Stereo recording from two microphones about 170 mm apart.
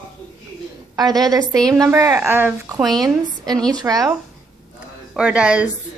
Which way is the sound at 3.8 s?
20° right (ahead or behind).